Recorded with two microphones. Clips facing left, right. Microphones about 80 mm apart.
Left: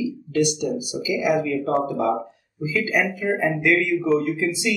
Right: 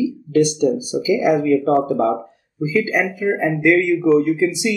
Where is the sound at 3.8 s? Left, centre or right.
Right.